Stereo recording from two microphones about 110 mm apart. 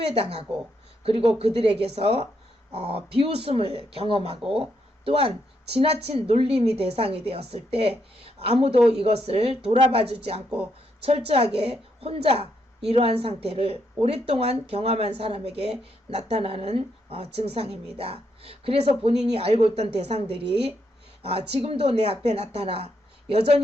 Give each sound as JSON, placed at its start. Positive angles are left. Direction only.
{"t": 1.0, "sound": "speech", "side_deg": -65}